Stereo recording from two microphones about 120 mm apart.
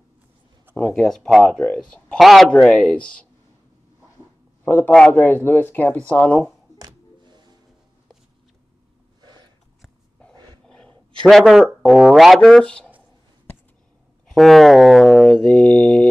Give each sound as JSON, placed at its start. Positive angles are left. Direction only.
{"t": 0.7, "sound": "mantra", "side_deg": 10}
{"t": 2.5, "sound": "speech", "side_deg": 5}
{"t": 4.6, "sound": "speech", "side_deg": 15}
{"t": 6.8, "sound": "a sound", "side_deg": -35}
{"t": 10.7, "sound": "speech", "side_deg": 5}
{"t": 14.2, "sound": "mantra", "side_deg": 0}